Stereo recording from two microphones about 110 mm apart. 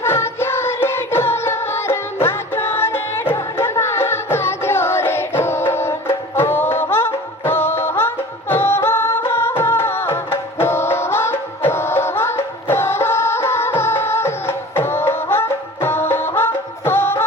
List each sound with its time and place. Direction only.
0.0 s music: 20° left (ahead or behind)